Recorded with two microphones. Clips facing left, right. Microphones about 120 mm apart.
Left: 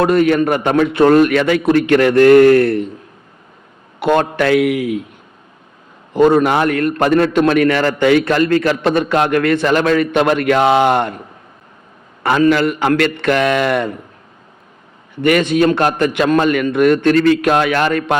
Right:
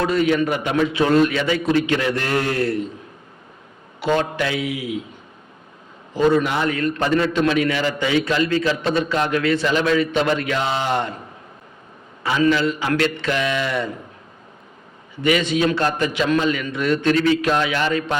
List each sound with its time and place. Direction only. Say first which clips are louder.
0.0 s a man's voice: left 6 dB; 55° left (ahead or behind)
4.0 s a man's voice: left 6 dB; 60° left (ahead or behind)
6.1 s a man's voice: left 6 dB; 55° left (ahead or behind)
12.2 s a man's voice: left 5 dB; 60° left (ahead or behind)
15.1 s a man's voice: left 6 dB; 55° left (ahead or behind)